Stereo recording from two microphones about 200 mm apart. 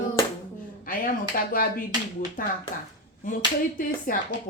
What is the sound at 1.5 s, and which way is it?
Speech, 45° left (ahead or behind).